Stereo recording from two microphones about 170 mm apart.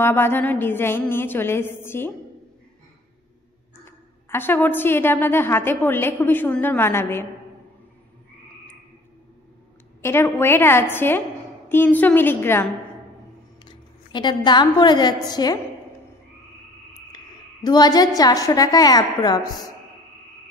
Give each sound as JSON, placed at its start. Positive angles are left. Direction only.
{"t": 0.0, "sound": "a woman's voice", "side_deg": 15}
{"t": 3.8, "sound": "a woman's voice", "side_deg": 15}
{"t": 10.0, "sound": "a woman's voice", "side_deg": 15}
{"t": 13.7, "sound": "a woman's voice", "side_deg": 25}
{"t": 17.6, "sound": "a woman's voice", "side_deg": 25}